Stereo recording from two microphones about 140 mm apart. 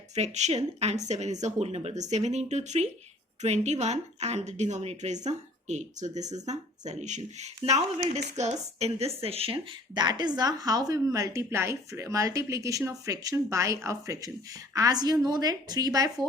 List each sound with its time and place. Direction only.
0.2 s a woman's voice: 55° right (ahead or behind); by 16.2 s 25° right (ahead or behind)